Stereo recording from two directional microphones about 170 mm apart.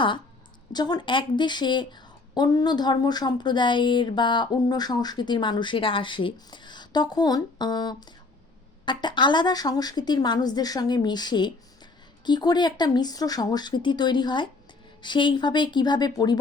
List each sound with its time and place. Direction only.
0.7 s a woman's voice: 25° left (ahead or behind)